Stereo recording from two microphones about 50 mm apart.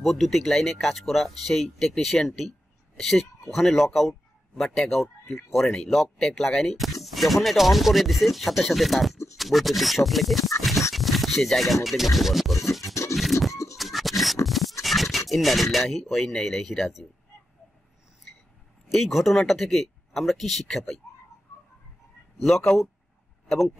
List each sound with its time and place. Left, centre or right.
0.0 s speech: centre
7.0 s a sound: centre
7.4 s speech: centre
12.8 s scratch: left
13.1 s scratch: centre
18.9 s speech: centre
22.4 s speech: centre